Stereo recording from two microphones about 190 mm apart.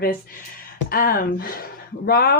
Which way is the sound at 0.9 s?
50° left (ahead or behind).